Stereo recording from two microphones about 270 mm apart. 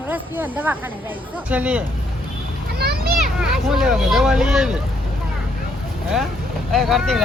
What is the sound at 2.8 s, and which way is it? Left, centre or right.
Children playing, right.